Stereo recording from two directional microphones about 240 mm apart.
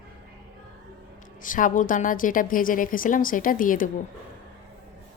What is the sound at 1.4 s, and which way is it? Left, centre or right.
A woman's voice, left.